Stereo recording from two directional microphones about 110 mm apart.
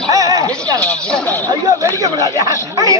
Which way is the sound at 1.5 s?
30° right (ahead or behind).